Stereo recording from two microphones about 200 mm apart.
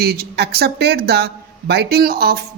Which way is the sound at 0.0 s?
50° right (ahead or behind).